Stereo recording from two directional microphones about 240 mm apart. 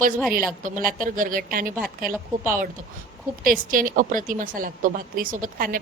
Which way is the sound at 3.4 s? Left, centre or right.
Right.